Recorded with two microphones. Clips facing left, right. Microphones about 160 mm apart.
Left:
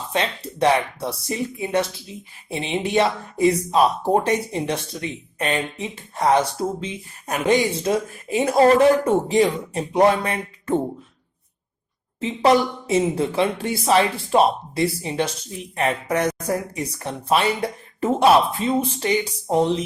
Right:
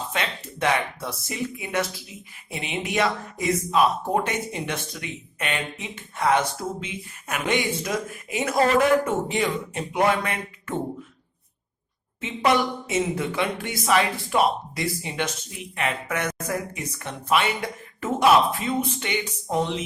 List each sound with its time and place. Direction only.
0.1 s speech: 30° left (ahead or behind)
12.2 s speech: 30° left (ahead or behind)